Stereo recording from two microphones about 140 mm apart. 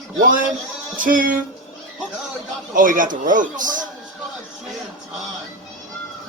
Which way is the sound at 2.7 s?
75° right (ahead or behind).